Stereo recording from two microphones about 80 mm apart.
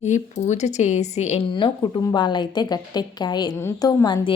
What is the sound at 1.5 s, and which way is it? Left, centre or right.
A woman's voice, left.